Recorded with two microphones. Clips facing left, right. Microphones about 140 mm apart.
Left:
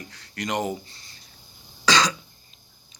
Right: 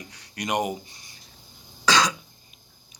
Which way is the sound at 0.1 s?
15° right (ahead or behind).